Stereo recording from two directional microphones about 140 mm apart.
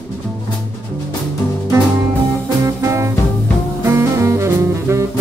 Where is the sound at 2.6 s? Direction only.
20° right (ahead or behind).